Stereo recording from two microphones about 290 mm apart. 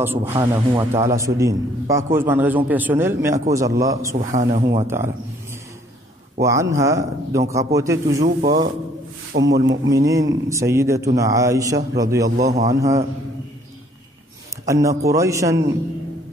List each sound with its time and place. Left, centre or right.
0.0 s a man's voice: centre
4.2 s speech: right
4.6 s a man's voice: centre
6.4 s a man's voice: centre
9.3 s speech: right
9.8 s a man's voice: centre
14.7 s a man's voice: centre